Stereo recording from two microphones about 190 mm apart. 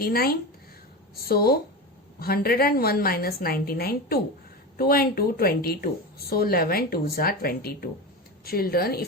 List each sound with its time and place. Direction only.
0.0 s a woman's voice: 50° left (ahead or behind)